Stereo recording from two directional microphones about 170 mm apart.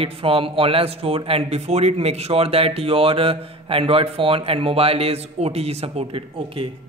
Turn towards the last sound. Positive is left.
turn(degrees=-30)  # may be behind; listen again after turning